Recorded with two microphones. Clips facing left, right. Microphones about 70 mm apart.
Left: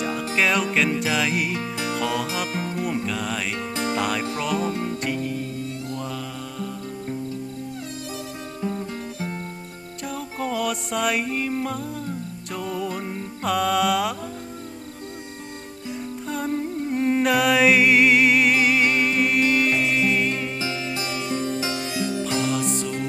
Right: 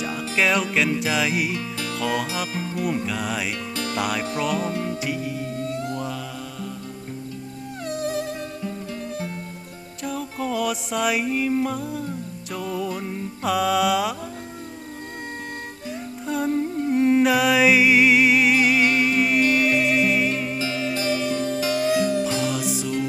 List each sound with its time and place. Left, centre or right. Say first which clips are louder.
0.0 s music: even; centre
1.5 s music: left 2 dB; centre
2.0 s music: right 2 dB; centre
2.6 s music: even; left
2.8 s music: right 4 dB; centre
10.0 s music: right 1 dB; centre
16.2 s music: right 4 dB; centre
20.6 s music: right 3 dB; centre
21.9 s music: right 5 dB; right
22.4 s music: left 1 dB; centre